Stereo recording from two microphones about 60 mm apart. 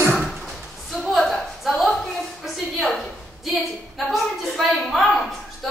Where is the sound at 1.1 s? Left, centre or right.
Centre.